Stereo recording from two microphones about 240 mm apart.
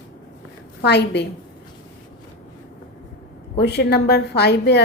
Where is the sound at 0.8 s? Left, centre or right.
Left.